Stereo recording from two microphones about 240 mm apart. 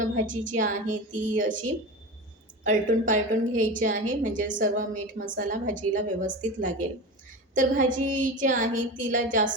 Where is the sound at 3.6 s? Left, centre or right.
Right.